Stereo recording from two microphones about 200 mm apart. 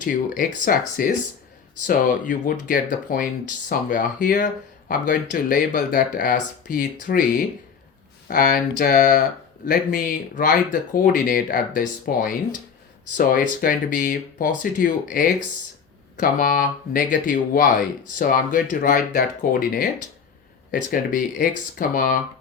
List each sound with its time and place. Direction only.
0.0 s speech: 40° left (ahead or behind)